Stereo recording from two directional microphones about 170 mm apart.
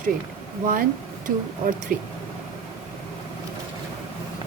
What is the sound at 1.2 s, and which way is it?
Speech, 55° right (ahead or behind).